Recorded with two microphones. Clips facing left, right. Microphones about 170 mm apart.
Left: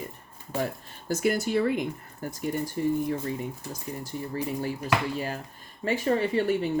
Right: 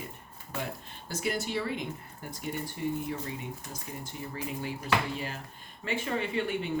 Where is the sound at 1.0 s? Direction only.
45° left (ahead or behind).